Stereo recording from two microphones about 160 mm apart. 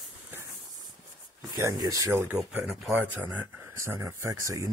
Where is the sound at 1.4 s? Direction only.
20° right (ahead or behind).